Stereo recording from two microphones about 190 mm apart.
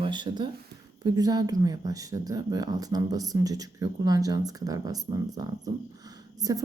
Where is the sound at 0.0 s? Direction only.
25° right (ahead or behind).